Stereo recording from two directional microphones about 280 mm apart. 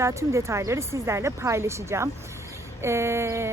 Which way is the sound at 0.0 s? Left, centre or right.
Centre.